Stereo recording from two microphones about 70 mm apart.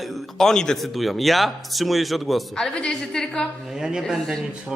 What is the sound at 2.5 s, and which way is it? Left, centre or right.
Speech, centre.